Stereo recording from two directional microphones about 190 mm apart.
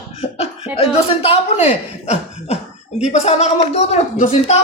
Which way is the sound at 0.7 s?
30° left (ahead or behind).